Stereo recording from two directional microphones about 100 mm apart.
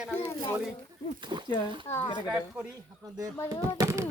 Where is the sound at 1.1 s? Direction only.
50° right (ahead or behind).